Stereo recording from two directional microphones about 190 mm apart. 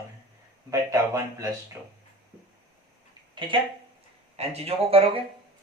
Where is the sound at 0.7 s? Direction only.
15° right (ahead or behind).